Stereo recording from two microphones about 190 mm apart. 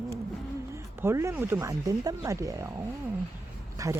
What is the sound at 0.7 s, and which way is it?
Speech, 15° right (ahead or behind).